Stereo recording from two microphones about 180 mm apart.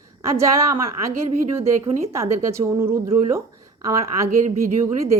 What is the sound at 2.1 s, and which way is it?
A woman's voice, 15° right (ahead or behind).